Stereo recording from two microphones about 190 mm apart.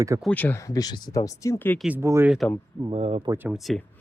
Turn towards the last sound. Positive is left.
turn(degrees=0)  # may be behind; listen again after turning